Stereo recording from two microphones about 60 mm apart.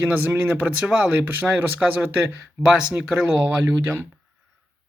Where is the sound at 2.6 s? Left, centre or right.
Centre.